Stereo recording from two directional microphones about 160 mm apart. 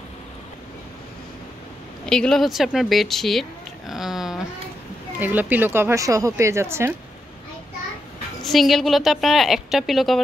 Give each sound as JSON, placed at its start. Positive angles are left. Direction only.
{"t": 2.0, "sound": "a woman's voice", "side_deg": 5}
{"t": 8.5, "sound": "a woman's voice", "side_deg": 0}